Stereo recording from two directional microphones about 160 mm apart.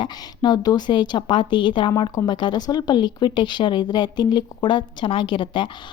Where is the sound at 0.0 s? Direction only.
25° left (ahead or behind).